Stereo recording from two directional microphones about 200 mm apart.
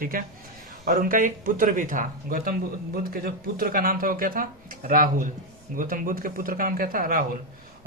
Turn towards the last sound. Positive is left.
turn(degrees=-45)  # may be behind; listen again after turning